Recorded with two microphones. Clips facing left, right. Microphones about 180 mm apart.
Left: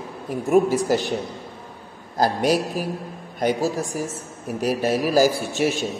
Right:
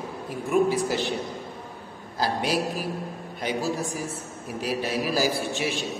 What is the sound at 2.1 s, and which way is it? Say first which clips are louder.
Speech: left 6 dB; 45° left (ahead or behind).